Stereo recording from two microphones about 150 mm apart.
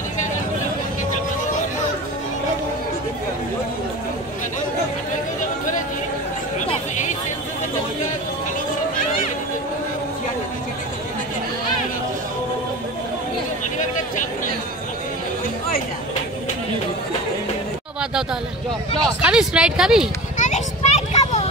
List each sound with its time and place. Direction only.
19.2 s speech: 5° right (ahead or behind)
20.3 s children playing: 55° left (ahead or behind)